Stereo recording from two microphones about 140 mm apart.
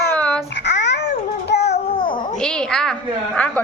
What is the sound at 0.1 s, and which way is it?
Babbling, 10° left (ahead or behind).